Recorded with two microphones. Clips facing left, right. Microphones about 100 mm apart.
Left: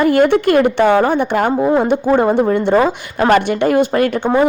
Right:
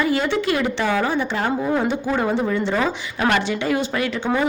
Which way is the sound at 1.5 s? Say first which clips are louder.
Left 7 dB; 35° left (ahead or behind).